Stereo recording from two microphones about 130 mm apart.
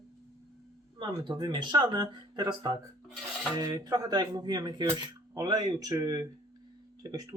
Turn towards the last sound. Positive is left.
turn(degrees=-30)  # may be behind; listen again after turning